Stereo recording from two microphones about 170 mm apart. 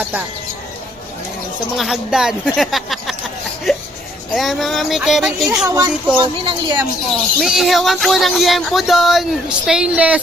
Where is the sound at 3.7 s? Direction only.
Centre (ahead or behind).